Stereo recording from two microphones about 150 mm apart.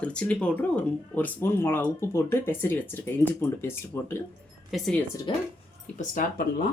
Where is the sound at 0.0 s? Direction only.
10° left (ahead or behind).